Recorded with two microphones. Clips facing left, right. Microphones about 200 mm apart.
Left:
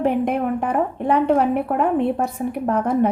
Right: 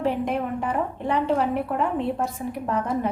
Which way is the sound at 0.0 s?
55° left (ahead or behind).